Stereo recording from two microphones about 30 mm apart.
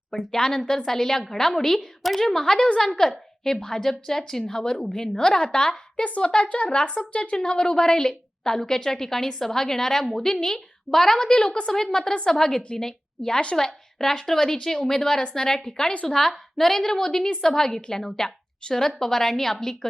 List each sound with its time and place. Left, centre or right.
0.3 s a woman's voice: left
5.5 s a woman's voice: left
6.0 s a woman's voice: left
6.7 s speech: left
7.3 s a woman's voice: left